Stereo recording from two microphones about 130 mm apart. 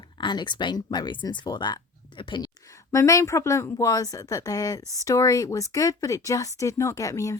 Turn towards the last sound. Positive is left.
turn(degrees=25)  # may be behind; listen again after turning